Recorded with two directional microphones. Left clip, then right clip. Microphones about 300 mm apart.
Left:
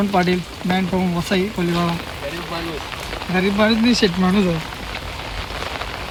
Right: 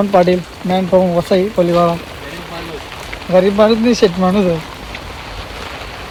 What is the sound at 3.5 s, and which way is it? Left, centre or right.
Speech, centre.